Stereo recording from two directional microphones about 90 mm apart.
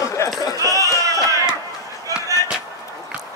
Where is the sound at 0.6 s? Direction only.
40° right (ahead or behind).